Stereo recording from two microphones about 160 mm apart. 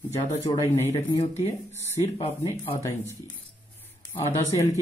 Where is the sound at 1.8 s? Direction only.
40° left (ahead or behind).